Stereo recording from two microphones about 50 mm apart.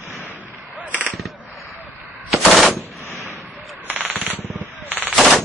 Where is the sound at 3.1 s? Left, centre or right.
Left.